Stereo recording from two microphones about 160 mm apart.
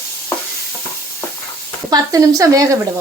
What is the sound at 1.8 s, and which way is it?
Speech, 25° right (ahead or behind).